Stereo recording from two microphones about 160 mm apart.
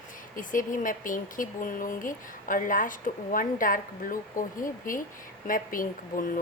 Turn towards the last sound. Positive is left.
turn(degrees=60)  # may be behind; listen again after turning